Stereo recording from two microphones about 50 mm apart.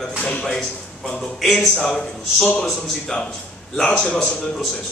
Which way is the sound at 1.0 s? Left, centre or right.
Centre.